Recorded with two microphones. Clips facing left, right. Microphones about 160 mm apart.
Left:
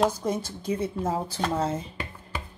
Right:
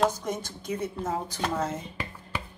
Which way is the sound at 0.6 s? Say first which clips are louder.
Left 3 dB; 30° left (ahead or behind).